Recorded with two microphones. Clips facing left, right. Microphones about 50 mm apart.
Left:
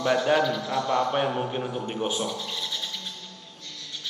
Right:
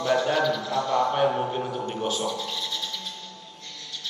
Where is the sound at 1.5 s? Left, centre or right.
Centre.